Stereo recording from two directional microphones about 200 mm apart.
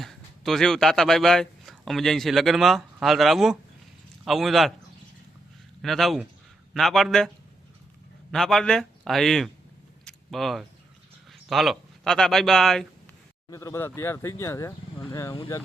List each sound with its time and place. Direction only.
0.0 s a man's voice: centre (ahead or behind)
5.8 s a man's voice: centre (ahead or behind)
8.3 s a man's voice: centre (ahead or behind)
10.0 s a sound: centre (ahead or behind)
11.3 s speech: centre (ahead or behind)
13.5 s speech: 15° left (ahead or behind)